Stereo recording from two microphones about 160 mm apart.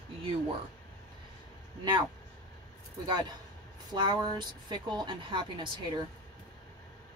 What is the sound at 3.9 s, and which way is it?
A woman's voice, 25° right (ahead or behind).